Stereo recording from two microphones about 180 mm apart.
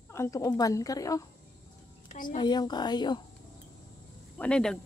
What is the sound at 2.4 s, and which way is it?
Speech, 25° left (ahead or behind).